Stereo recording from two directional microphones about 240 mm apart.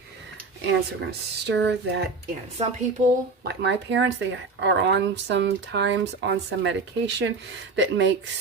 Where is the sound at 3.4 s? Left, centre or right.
Right.